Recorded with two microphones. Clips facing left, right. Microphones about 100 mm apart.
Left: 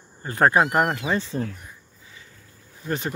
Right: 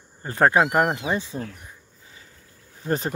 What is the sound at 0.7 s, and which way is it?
Speech, 15° right (ahead or behind).